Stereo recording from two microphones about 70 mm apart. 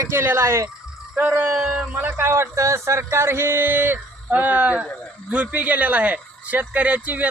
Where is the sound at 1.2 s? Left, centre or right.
Right.